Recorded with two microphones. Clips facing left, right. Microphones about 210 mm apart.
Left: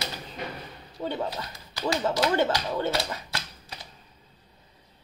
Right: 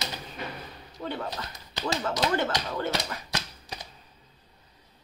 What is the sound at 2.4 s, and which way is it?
Speech, 30° left (ahead or behind).